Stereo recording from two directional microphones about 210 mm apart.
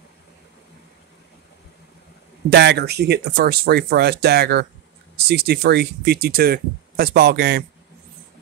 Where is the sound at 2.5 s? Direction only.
50° right (ahead or behind).